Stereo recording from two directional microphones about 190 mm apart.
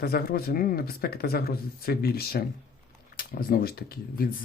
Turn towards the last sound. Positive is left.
turn(degrees=55)  # may be behind; listen again after turning